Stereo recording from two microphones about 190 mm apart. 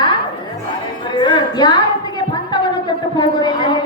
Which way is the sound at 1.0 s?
25° left (ahead or behind).